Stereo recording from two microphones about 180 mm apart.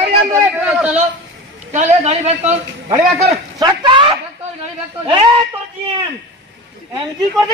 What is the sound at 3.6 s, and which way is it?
Speech, 25° right (ahead or behind).